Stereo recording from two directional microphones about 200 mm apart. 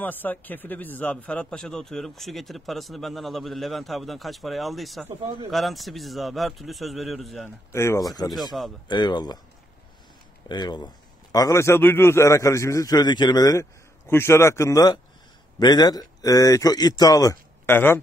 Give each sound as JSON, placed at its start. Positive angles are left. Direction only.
{"t": 0.0, "sound": "a man's voice", "side_deg": 10}
{"t": 7.7, "sound": "speech", "side_deg": 15}
{"t": 10.5, "sound": "a man's voice", "side_deg": 20}